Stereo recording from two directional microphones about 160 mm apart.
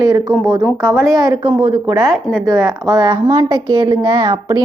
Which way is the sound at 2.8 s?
20° right (ahead or behind).